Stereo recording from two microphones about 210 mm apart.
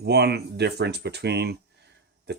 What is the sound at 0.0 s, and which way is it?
Speech, 50° right (ahead or behind).